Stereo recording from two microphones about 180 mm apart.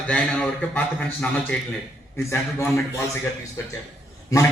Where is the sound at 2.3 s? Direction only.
15° left (ahead or behind).